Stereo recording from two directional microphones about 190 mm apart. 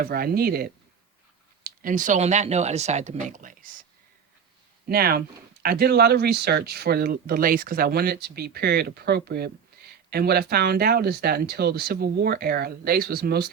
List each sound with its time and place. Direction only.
0.0 s speech: 50° right (ahead or behind)
4.9 s speech: 55° right (ahead or behind)